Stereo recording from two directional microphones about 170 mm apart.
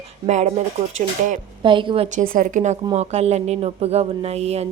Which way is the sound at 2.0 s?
50° right (ahead or behind).